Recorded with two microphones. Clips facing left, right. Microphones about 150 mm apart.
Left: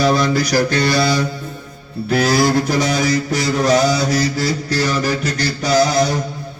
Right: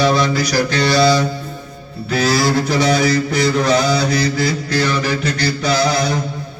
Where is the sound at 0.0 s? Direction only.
45° left (ahead or behind).